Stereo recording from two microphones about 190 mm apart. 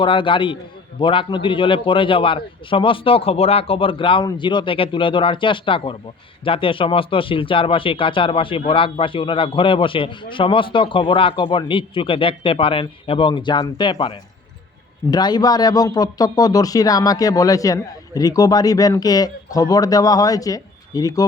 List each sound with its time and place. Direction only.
0.0 s speech: 25° left (ahead or behind)